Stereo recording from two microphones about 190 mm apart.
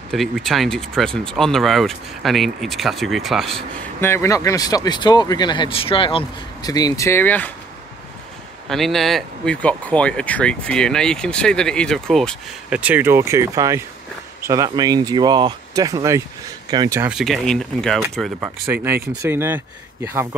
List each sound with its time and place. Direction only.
0.1 s speech: centre (ahead or behind)
4.0 s speech: 15° left (ahead or behind)
8.6 s speech: centre (ahead or behind); by 17.1 s 20° right (ahead or behind)
17.1 s speech: centre (ahead or behind)
18.4 s speech: 10° right (ahead or behind)